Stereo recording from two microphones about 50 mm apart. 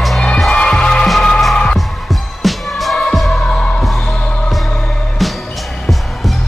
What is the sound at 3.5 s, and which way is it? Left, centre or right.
Music, centre.